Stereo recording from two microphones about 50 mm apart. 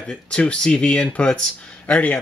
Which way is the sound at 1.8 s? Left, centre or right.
Left.